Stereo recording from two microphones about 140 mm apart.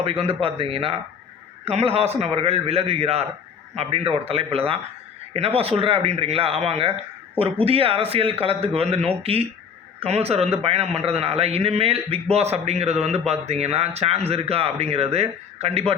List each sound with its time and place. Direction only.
0.0 s a man's voice: 45° right (ahead or behind)